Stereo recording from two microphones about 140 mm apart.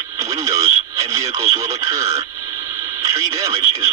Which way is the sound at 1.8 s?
20° right (ahead or behind).